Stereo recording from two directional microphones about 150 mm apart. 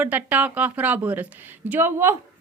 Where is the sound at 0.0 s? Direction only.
10° right (ahead or behind).